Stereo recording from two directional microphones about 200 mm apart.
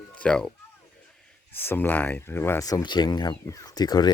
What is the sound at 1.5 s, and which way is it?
Speech, 10° left (ahead or behind).